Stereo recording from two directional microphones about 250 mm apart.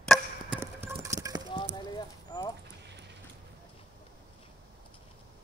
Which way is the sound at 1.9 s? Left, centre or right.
Centre.